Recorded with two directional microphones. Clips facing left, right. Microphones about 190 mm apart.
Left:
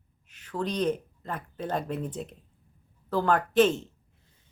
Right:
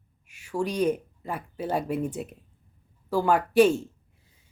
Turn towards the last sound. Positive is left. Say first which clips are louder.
# right 3 dB
turn(degrees=-10)  # may be behind; listen again after turning